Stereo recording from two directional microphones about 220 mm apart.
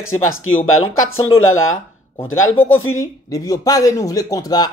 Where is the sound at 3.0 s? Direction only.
15° left (ahead or behind).